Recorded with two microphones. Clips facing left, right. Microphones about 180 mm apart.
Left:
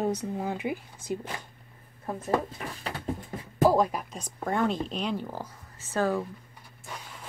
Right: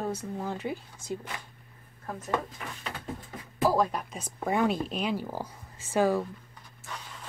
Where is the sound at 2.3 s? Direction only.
35° left (ahead or behind).